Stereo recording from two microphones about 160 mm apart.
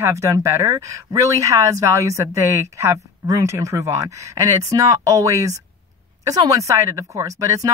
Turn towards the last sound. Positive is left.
turn(degrees=-20)  # may be behind; listen again after turning